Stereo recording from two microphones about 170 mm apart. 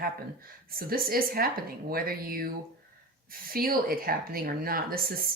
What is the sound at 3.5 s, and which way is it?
Speech, 60° right (ahead or behind).